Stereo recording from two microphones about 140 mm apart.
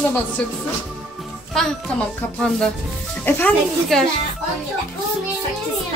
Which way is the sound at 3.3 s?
15° left (ahead or behind).